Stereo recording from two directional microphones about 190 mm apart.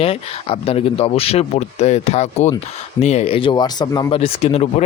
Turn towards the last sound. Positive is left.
turn(degrees=30)  # may be behind; listen again after turning